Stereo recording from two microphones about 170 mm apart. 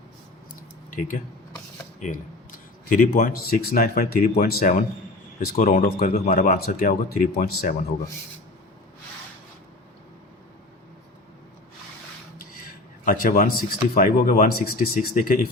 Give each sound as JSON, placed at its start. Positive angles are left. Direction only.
{"t": 0.9, "sound": "speech", "side_deg": 50}
{"t": 13.1, "sound": "speech", "side_deg": 55}